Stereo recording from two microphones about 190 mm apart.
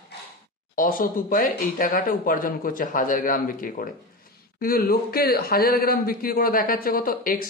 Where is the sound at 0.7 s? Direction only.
45° left (ahead or behind).